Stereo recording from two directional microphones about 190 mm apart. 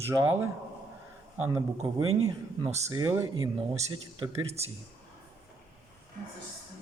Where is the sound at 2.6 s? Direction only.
35° right (ahead or behind).